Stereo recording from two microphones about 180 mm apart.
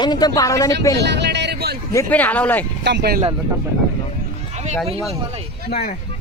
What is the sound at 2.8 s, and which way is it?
Speech, 65° right (ahead or behind).